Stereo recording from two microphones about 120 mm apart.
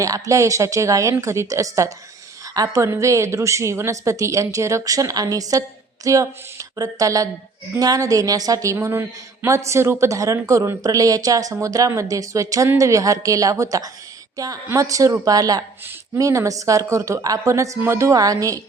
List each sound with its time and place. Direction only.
0.0 s a woman's voice: 25° right (ahead or behind)